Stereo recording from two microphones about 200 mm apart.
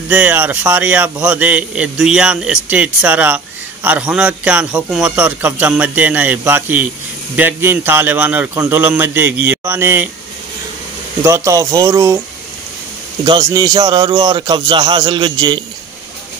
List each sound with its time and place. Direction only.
0.1 s a man's voice: 10° right (ahead or behind)
11.2 s a man's voice: 15° right (ahead or behind)
13.2 s a man's voice: 20° right (ahead or behind)